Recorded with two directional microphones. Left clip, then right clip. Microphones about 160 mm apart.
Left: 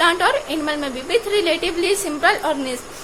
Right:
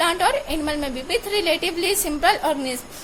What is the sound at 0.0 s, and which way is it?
A woman's voice, 20° right (ahead or behind).